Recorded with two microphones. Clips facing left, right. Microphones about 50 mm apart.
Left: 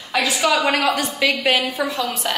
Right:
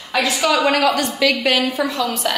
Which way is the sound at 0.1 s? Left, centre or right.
Centre.